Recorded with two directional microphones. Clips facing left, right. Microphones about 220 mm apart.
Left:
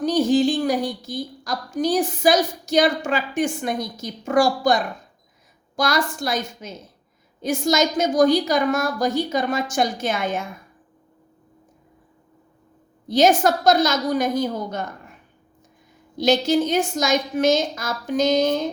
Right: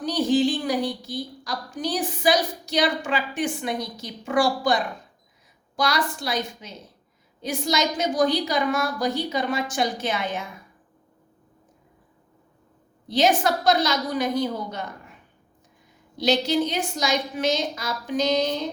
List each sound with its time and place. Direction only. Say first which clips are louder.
0.0 s a woman's voice: left 3 dB; 45° left (ahead or behind)
13.1 s a woman's voice: left 4 dB; 45° left (ahead or behind)
16.1 s a woman's voice: left 3 dB; 45° left (ahead or behind)